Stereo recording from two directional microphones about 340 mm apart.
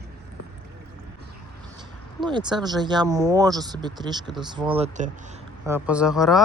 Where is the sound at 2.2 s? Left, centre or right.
Centre.